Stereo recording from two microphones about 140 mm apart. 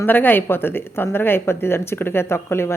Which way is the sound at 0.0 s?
15° left (ahead or behind).